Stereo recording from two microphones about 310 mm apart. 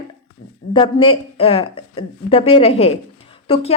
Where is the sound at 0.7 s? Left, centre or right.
Centre.